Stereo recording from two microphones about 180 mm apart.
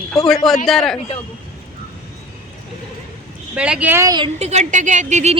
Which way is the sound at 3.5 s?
5° right (ahead or behind).